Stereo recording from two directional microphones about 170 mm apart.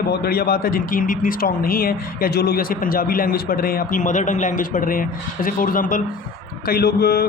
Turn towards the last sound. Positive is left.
turn(degrees=65)  # may be behind; listen again after turning